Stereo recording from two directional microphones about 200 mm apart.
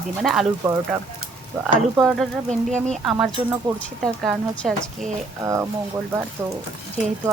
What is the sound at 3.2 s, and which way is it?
Speech, 10° right (ahead or behind).